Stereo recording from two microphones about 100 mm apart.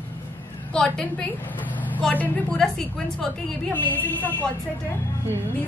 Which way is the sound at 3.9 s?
20° left (ahead or behind).